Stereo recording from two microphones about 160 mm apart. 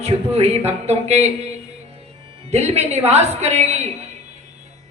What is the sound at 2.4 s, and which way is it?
A woman's voice, 40° right (ahead or behind).